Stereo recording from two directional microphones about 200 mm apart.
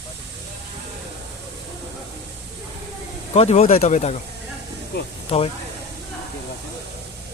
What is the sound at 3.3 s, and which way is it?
Speech, 35° left (ahead or behind).